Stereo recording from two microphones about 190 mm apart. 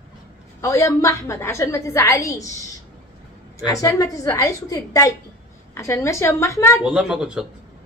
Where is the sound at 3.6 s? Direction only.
15° left (ahead or behind).